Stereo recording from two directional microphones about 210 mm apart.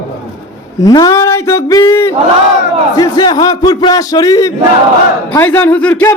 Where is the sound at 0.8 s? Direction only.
15° left (ahead or behind).